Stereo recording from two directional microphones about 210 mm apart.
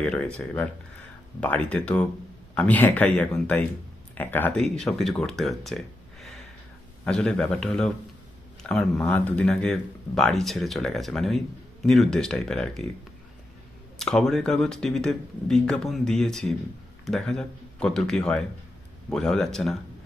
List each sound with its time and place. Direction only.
0.0 s speech: 5° left (ahead or behind)
13.9 s speech: centre (ahead or behind)